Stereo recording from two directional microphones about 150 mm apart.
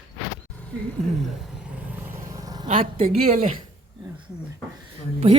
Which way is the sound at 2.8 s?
40° right (ahead or behind).